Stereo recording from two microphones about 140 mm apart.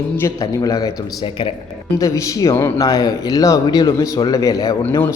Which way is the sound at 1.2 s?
40° left (ahead or behind).